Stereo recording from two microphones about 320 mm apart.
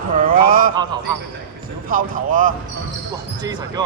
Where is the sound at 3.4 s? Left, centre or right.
Centre.